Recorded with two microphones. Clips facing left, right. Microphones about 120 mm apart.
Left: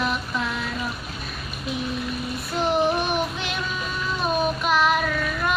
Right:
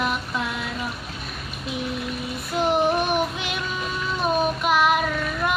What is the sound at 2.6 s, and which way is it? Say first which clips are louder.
Child singing: right 1 dB; 15° right (ahead or behind).